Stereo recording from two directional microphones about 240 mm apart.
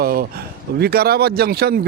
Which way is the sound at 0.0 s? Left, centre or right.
Right.